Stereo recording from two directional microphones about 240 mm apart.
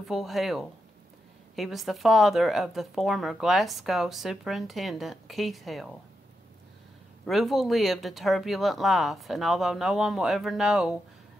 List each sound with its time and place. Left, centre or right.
0.1 s speech: centre
7.2 s speech: centre